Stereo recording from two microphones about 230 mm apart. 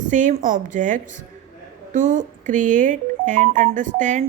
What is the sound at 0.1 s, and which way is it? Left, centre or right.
A woman's voice, right.